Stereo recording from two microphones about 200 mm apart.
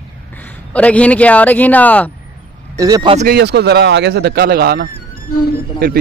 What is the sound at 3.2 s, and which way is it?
Speech, 55° right (ahead or behind).